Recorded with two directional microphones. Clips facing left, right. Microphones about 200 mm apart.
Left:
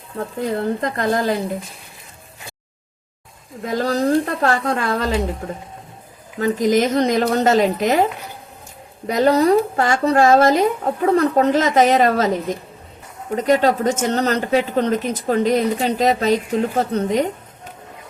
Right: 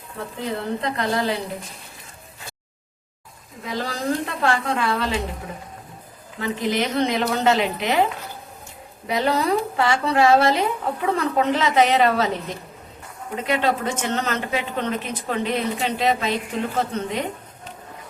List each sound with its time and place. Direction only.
0.2 s speech: 45° left (ahead or behind)
3.6 s speech: 45° left (ahead or behind)
6.4 s speech: 40° left (ahead or behind)
9.0 s speech: 45° left (ahead or behind)
13.3 s speech: 40° left (ahead or behind)